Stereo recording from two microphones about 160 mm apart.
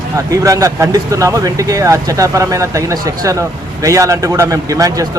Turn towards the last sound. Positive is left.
turn(degrees=-20)  # may be behind; listen again after turning